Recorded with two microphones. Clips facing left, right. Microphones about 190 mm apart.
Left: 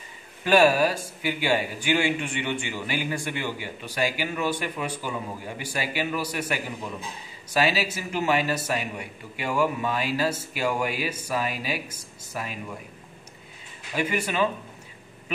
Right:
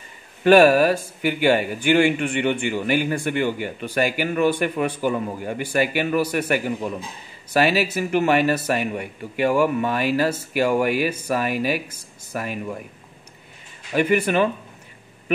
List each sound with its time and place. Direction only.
0.4 s speech: 55° right (ahead or behind)
13.9 s speech: 55° right (ahead or behind)